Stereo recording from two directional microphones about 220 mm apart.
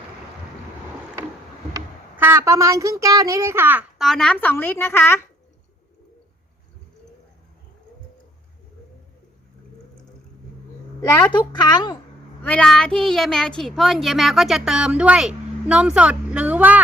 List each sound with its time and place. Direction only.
1.7 s speech: 10° right (ahead or behind); by 5.2 s 10° left (ahead or behind)
11.0 s a woman's voice: 20° left (ahead or behind)
12.4 s speech: 5° left (ahead or behind)